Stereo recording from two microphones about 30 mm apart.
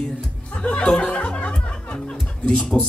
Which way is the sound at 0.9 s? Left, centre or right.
Left.